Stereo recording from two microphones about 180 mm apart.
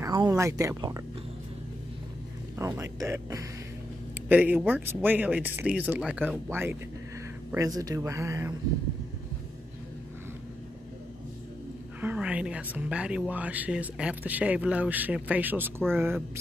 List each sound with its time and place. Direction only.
0.0 s a woman's voice: 20° right (ahead or behind)
2.6 s a woman's voice: 15° right (ahead or behind)
12.0 s a woman's voice: 10° right (ahead or behind)